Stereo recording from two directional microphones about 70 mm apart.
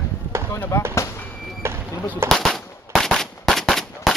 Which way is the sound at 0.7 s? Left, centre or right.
Left.